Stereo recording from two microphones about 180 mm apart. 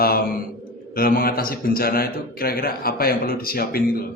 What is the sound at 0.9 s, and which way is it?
A man's voice, 55° left (ahead or behind).